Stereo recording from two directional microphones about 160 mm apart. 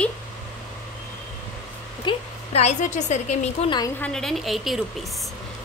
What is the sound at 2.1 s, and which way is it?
Speech, 30° left (ahead or behind).